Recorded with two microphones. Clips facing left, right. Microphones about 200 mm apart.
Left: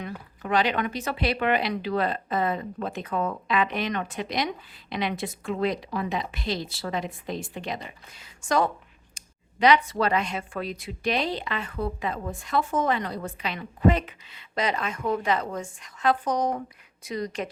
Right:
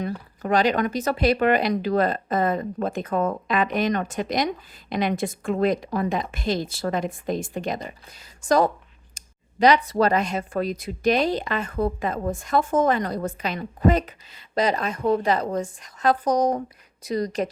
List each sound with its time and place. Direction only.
0.0 s speech: 40° right (ahead or behind)